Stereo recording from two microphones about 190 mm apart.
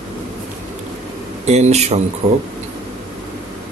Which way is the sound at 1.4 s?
35° right (ahead or behind).